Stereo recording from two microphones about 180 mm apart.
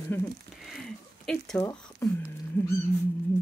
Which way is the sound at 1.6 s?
15° left (ahead or behind).